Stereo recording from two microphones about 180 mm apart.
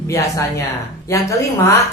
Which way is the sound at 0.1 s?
15° left (ahead or behind).